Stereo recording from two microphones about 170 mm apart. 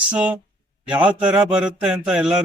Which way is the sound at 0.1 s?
10° right (ahead or behind).